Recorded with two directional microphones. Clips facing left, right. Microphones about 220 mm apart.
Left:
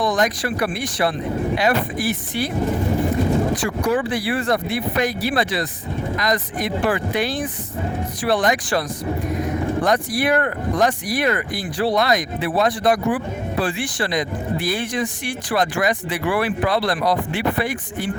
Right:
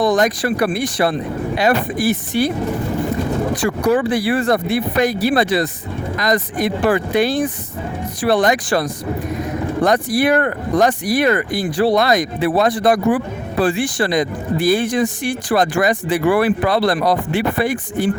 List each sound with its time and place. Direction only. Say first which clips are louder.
0.0 s speech: right 5 dB; 40° right (ahead or behind)
3.6 s speech: right 4 dB; 40° right (ahead or behind)
9.8 s speech: right 7 dB; 45° right (ahead or behind)